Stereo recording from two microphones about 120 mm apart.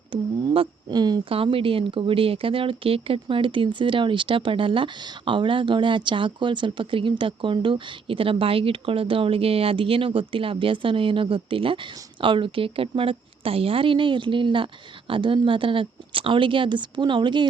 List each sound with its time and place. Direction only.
0.1 s speech: 45° right (ahead or behind)
1.3 s speech: 50° right (ahead or behind)